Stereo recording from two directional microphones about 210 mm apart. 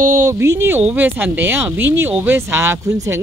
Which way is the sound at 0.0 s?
15° right (ahead or behind).